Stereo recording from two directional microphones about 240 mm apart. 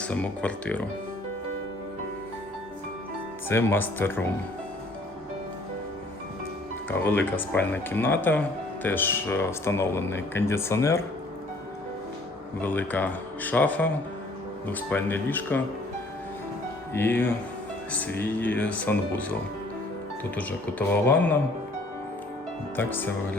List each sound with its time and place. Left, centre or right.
0.0 s speech: centre
3.5 s speech: centre
6.9 s speech: centre
12.6 s speech: centre
16.9 s speech: centre
22.7 s speech: centre